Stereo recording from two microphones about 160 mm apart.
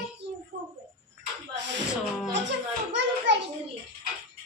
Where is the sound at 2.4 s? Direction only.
90° right.